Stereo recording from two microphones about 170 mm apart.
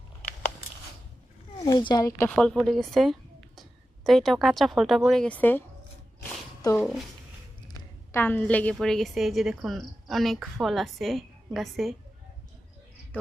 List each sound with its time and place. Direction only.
1.6 s speech: 25° left (ahead or behind)
2.3 s a woman's voice: 5° left (ahead or behind)
6.6 s speech: 20° left (ahead or behind)
8.1 s a woman's voice: 10° left (ahead or behind)